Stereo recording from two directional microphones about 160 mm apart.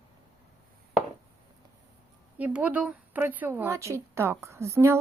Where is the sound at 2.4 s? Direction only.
10° right (ahead or behind).